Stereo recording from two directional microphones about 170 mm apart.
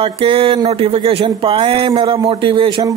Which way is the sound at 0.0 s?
35° right (ahead or behind).